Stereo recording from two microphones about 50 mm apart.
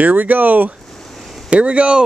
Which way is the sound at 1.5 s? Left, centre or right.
Right.